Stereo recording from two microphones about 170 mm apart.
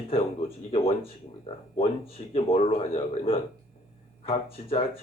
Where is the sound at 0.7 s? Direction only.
35° left (ahead or behind).